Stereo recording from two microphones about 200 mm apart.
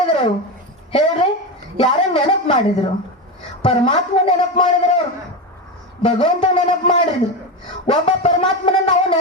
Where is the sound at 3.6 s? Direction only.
25° left (ahead or behind).